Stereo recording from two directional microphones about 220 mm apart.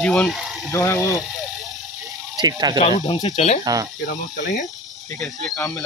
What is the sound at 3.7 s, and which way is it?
Speech, 15° right (ahead or behind).